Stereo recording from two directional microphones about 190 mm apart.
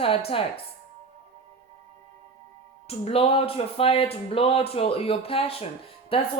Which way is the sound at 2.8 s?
30° left (ahead or behind).